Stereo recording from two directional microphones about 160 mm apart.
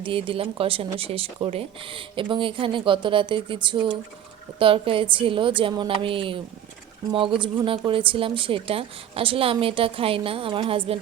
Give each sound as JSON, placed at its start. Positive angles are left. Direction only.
{"t": 0.0, "sound": "speech", "side_deg": -35}